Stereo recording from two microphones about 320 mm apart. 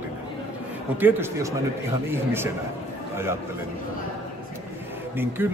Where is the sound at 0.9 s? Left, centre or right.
Centre.